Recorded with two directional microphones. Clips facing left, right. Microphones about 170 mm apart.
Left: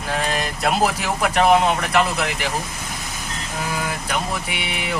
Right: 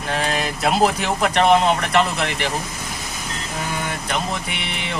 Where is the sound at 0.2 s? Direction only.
Centre (ahead or behind).